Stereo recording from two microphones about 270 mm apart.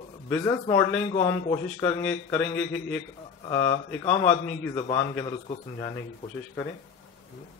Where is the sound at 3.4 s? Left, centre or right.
Left.